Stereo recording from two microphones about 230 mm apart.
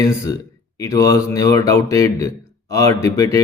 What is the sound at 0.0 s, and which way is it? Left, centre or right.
A man's voice, centre.